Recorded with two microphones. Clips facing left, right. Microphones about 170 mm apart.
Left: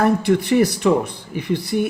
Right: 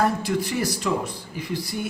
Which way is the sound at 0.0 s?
60° left (ahead or behind).